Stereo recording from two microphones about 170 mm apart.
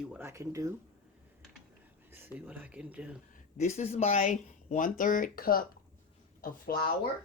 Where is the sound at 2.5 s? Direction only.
10° right (ahead or behind).